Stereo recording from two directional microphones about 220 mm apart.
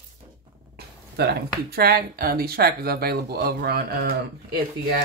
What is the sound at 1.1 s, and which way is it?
Speech, 45° right (ahead or behind).